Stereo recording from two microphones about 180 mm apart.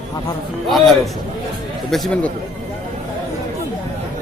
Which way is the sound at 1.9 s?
5° left (ahead or behind).